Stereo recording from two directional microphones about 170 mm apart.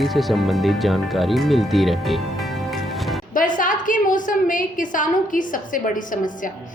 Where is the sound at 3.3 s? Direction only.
55° left (ahead or behind).